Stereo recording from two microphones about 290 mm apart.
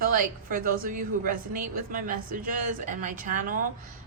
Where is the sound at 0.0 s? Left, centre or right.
Right.